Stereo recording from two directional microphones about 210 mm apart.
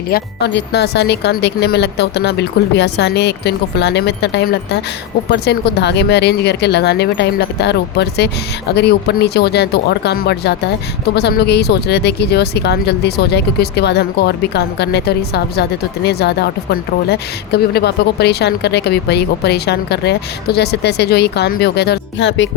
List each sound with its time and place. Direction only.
0.1 s a woman's voice: 55° left (ahead or behind)